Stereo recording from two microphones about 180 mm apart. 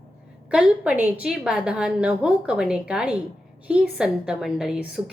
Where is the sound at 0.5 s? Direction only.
10° right (ahead or behind).